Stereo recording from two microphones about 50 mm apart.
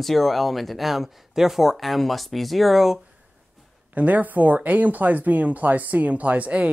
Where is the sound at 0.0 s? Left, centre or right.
Centre.